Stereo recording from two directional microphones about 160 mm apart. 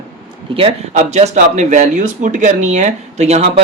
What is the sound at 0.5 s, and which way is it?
Speech, 40° right (ahead or behind).